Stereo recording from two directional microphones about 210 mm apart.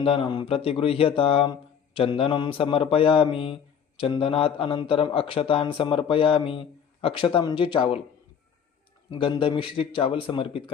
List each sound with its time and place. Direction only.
0.0 s speech: 25° left (ahead or behind)
9.0 s speech: 20° left (ahead or behind)